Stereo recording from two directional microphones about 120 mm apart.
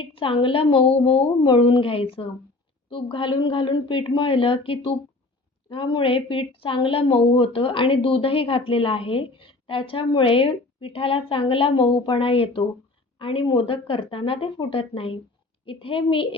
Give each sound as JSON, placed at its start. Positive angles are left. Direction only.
{"t": 0.0, "sound": "a woman's voice", "side_deg": 50}